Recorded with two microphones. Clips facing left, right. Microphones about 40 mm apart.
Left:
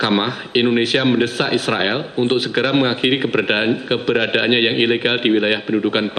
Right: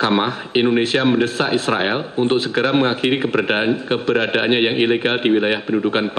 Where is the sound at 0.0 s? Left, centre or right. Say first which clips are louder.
Even; centre.